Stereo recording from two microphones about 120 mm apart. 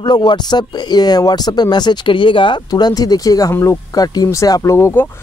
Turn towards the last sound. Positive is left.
turn(degrees=25)  # may be behind; listen again after turning